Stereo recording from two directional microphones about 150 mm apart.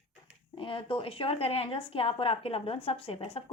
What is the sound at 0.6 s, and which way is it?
A woman's voice, 35° left (ahead or behind).